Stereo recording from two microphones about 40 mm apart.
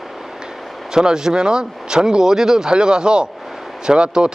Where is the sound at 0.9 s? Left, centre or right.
Centre.